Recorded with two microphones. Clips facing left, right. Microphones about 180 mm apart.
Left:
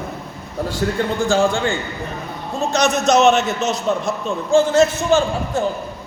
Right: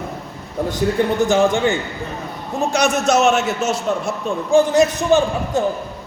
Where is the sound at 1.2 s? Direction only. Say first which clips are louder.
Right 1 dB; 20° right (ahead or behind).